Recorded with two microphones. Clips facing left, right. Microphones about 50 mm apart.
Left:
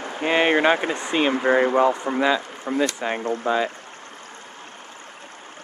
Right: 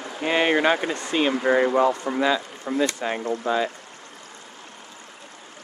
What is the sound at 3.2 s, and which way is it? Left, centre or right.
Speech, left.